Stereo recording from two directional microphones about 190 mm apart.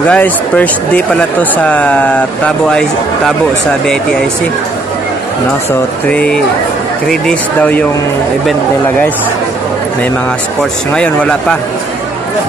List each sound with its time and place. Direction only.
0.1 s speech: 10° left (ahead or behind)
6.0 s speech: 5° left (ahead or behind)